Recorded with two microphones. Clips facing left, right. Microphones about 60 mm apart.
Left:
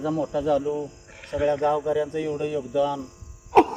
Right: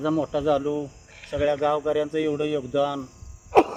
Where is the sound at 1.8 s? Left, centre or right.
Right.